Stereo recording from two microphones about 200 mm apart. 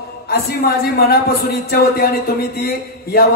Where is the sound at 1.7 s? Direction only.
50° left (ahead or behind).